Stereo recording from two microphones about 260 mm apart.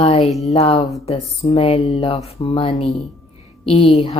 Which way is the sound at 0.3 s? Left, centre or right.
Centre.